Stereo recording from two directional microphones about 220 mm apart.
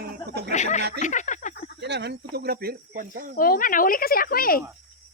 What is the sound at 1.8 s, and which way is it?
Speech, 50° right (ahead or behind).